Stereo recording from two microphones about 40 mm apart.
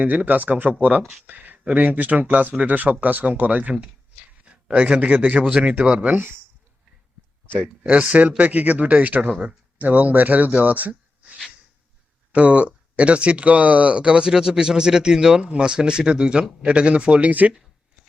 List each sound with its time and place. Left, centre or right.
0.0 s speech: right
1.6 s speech: right
4.4 s a sound: right
5.0 s speech: right
5.8 s speech: right
6.1 s speech: right
7.6 s speech: right
12.3 s speech: right